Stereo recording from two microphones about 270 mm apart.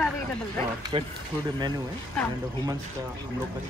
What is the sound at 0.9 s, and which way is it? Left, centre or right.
Speech, centre.